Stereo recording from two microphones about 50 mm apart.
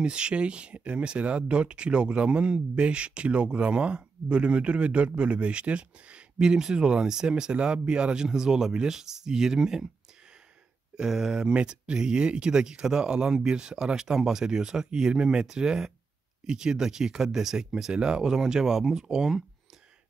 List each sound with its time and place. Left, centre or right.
0.0 s speech: centre
11.0 s speech: centre
11.5 s speech: right